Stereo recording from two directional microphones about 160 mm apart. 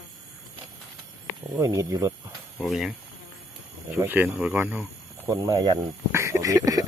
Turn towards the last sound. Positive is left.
turn(degrees=-20)  # may be behind; listen again after turning